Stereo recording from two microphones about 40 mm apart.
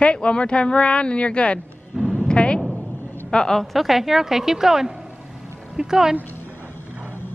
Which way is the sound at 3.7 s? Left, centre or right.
Centre.